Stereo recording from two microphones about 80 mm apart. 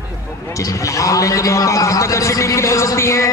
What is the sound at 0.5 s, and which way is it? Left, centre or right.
A man's voice, left.